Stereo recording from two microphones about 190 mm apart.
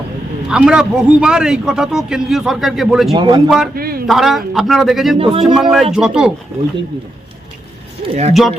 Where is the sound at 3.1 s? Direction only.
25° right (ahead or behind).